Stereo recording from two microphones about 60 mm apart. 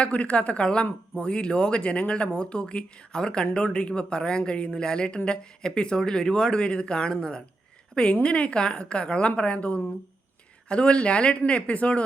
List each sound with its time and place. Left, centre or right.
0.0 s speech: left